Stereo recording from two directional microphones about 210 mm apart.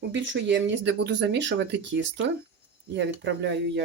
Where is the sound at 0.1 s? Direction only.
60° right (ahead or behind).